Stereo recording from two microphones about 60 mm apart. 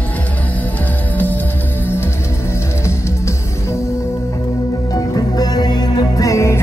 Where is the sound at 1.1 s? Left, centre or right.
Left.